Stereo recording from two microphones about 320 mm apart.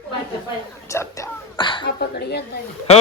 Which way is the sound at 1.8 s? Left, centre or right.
Left.